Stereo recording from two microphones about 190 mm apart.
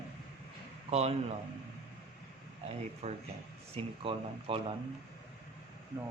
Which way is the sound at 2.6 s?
35° right (ahead or behind).